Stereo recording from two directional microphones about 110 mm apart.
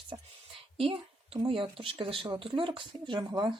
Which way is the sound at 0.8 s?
55° right (ahead or behind).